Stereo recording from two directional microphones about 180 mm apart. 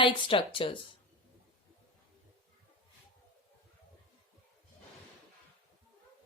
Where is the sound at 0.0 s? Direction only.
30° left (ahead or behind).